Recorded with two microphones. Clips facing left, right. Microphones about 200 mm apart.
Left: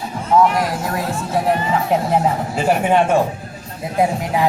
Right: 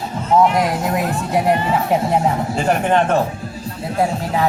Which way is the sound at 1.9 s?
Centre (ahead or behind).